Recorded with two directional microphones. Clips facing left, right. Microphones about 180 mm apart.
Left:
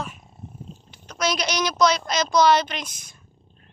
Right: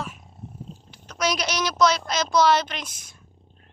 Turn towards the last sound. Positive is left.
turn(degrees=-5)  # may be behind; listen again after turning